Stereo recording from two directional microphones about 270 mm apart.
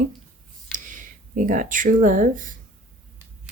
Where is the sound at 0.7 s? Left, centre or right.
Right.